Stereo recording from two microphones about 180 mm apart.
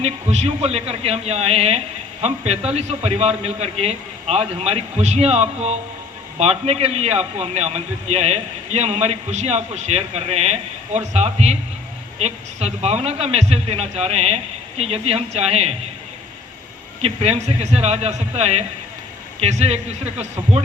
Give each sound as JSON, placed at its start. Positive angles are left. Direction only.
{"t": 0.0, "sound": "a man's voice", "side_deg": -35}
{"t": 17.0, "sound": "a man's voice", "side_deg": -35}